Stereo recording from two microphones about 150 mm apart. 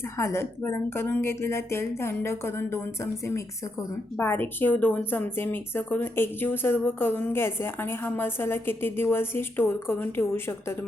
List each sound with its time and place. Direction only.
0.0 s a woman's voice: 15° left (ahead or behind)